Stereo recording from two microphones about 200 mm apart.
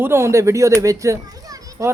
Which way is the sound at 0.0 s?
10° right (ahead or behind).